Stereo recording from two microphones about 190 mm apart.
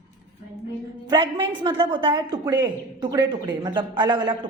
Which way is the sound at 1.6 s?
25° right (ahead or behind).